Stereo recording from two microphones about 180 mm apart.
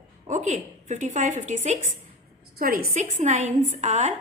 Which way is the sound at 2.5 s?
55° right (ahead or behind).